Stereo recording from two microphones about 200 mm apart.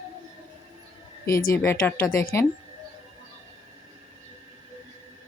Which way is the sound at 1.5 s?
15° left (ahead or behind).